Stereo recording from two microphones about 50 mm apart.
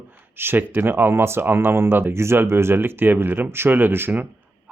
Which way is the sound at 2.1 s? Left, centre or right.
Right.